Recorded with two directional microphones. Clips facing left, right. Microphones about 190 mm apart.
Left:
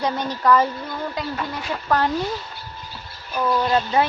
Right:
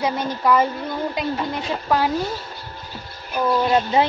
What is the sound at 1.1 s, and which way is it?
Speech, 20° right (ahead or behind).